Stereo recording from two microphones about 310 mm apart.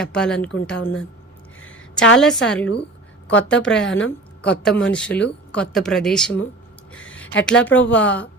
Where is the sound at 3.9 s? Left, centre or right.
Left.